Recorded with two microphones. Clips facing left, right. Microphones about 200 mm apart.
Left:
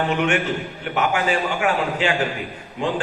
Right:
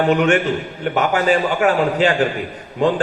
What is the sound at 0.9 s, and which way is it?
A man's voice, 40° right (ahead or behind).